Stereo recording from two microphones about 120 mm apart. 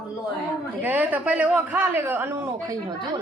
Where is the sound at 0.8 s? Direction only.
15° right (ahead or behind).